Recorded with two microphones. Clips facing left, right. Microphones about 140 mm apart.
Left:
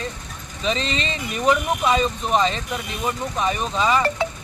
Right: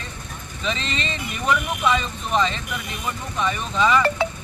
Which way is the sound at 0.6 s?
35° left (ahead or behind).